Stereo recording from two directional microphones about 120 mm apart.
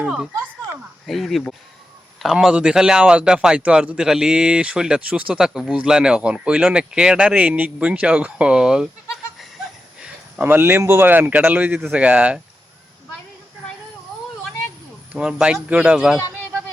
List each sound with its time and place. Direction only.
0.0 s speech: 5° right (ahead or behind)
10.0 s speech: 10° right (ahead or behind)
15.1 s speech: 10° right (ahead or behind)